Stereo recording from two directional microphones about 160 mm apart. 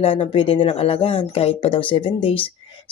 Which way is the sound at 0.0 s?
35° left (ahead or behind).